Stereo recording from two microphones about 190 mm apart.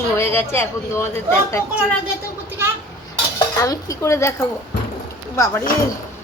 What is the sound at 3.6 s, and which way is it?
Speech, 15° left (ahead or behind).